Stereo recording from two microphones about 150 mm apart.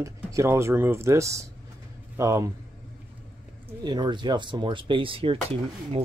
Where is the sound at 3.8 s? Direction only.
30° right (ahead or behind).